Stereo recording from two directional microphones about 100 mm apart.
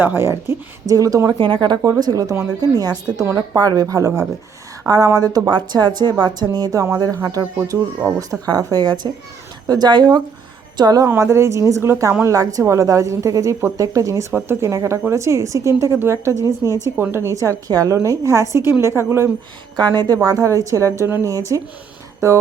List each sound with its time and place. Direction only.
0.0 s speech: 20° right (ahead or behind)
1.4 s a woman's voice: 55° right (ahead or behind); by 7.4 s 35° right (ahead or behind)
8.4 s a woman's voice: 40° right (ahead or behind)
11.0 s a woman's voice: 30° right (ahead or behind)
19.7 s speech: 45° right (ahead or behind)
20.2 s a woman's voice: 30° right (ahead or behind)